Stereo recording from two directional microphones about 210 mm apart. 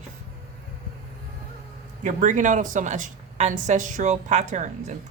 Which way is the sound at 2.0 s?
35° right (ahead or behind).